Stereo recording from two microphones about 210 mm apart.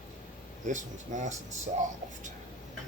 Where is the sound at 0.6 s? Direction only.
35° right (ahead or behind).